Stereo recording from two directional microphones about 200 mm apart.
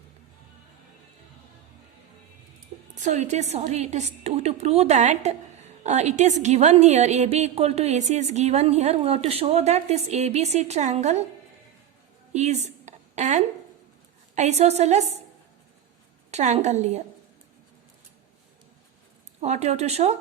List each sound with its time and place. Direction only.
3.0 s a woman's voice: 35° right (ahead or behind)
12.3 s a sound: 35° right (ahead or behind)
14.3 s a woman's voice: 35° right (ahead or behind)
16.3 s a woman's voice: 35° right (ahead or behind)
19.4 s a woman's voice: 35° right (ahead or behind)